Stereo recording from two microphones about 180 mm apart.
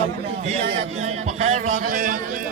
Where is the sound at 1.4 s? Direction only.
45° right (ahead or behind).